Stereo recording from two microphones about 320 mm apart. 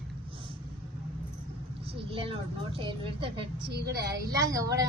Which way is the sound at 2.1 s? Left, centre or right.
Centre.